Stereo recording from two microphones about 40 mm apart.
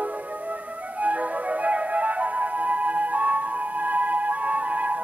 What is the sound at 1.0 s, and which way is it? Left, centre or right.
Music, right.